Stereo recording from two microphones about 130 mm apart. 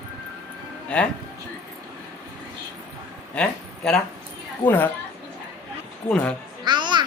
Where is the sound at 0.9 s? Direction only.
10° left (ahead or behind).